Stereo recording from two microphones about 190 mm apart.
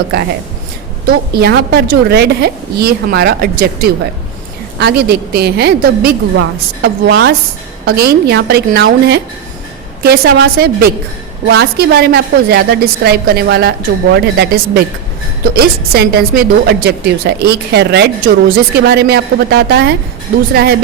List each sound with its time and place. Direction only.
1.0 s a woman's voice: 60° right (ahead or behind)